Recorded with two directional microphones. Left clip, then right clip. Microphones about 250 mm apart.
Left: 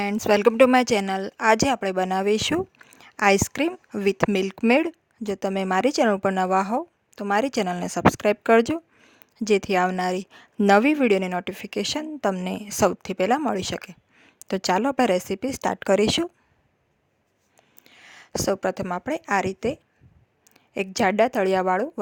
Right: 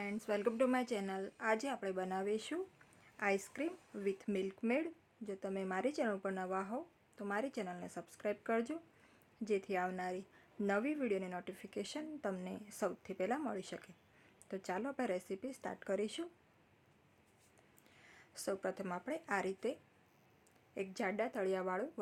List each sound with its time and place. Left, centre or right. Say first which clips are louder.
0.0 s a woman's voice: left 19 dB; left
17.8 s a woman's voice: left 16 dB; left